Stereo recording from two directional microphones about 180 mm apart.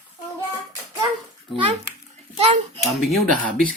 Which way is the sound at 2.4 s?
35° right (ahead or behind).